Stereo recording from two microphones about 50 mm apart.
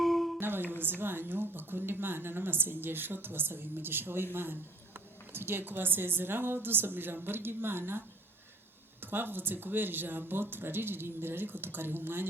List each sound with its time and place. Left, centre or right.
0.0 s music: centre
0.3 s a woman's voice: right